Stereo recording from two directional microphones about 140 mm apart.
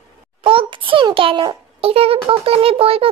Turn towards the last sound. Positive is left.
turn(degrees=-40)  # may be behind; listen again after turning